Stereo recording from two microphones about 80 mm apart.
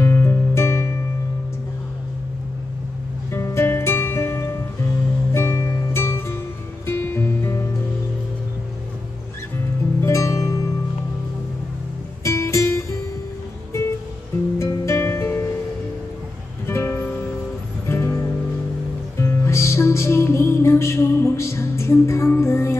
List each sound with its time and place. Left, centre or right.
0.0 s music: left
3.3 s music: left
10.0 s music: left
12.2 s music: left
14.6 s music: left
16.6 s music: left